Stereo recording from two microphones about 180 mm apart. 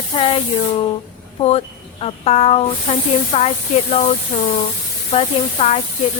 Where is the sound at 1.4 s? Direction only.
35° left (ahead or behind).